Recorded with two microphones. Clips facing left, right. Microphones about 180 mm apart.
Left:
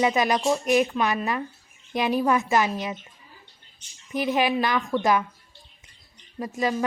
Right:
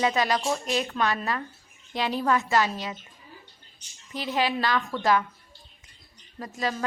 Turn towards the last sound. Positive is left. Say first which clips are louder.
# left 4 dB
turn(degrees=20)  # may be behind; listen again after turning